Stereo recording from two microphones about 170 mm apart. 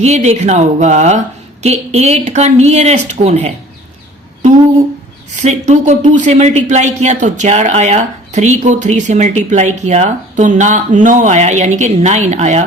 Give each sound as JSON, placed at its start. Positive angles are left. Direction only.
{"t": 0.0, "sound": "a woman's voice", "side_deg": -40}
{"t": 5.3, "sound": "speech", "side_deg": -45}